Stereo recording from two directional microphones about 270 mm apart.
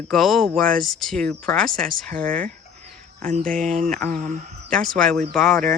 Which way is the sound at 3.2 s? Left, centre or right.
Right.